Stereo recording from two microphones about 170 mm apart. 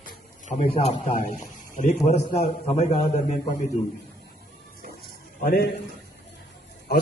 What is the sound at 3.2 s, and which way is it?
Speech, 50° left (ahead or behind).